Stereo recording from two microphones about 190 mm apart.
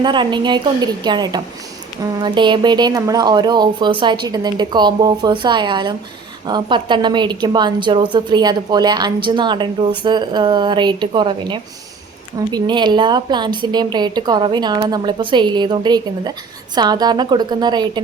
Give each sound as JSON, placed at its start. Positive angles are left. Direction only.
{"t": 0.0, "sound": "a woman's voice", "side_deg": -25}